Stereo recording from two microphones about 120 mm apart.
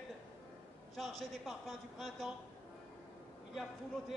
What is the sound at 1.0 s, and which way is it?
Speech, centre (ahead or behind).